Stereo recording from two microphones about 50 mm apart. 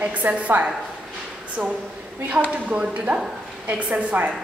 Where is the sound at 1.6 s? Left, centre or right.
Centre.